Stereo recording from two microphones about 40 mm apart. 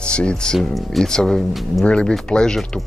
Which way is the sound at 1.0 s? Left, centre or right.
Centre.